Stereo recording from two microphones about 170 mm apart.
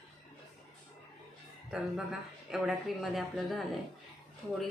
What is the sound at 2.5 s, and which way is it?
Speech, centre (ahead or behind).